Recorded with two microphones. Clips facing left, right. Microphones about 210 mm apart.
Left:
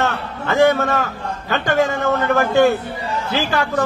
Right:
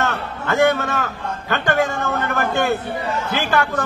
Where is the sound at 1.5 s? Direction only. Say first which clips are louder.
Left 2 dB; 50° right (ahead or behind).